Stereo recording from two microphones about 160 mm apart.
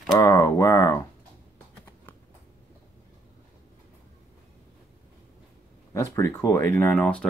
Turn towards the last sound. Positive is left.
turn(degrees=10)  # may be behind; listen again after turning